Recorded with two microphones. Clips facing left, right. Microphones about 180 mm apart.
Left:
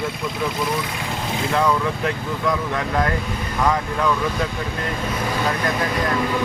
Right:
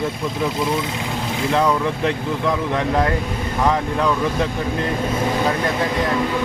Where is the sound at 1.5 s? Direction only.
25° right (ahead or behind).